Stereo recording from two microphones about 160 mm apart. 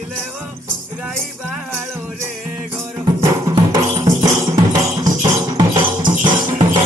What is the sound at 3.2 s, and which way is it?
Music, 20° right (ahead or behind).